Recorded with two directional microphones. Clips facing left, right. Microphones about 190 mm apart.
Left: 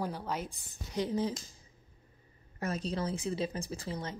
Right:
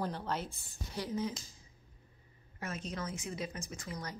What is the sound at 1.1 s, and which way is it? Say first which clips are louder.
Speech: left 2 dB; 30° left (ahead or behind).